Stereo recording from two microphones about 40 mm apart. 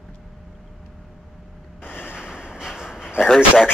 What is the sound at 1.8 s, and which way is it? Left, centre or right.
Ocean, left.